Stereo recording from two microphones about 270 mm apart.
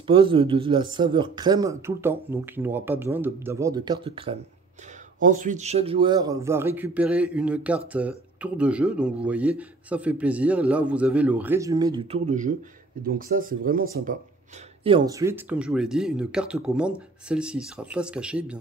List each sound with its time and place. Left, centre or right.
0.0 s a man's voice: centre
14.8 s a man's voice: centre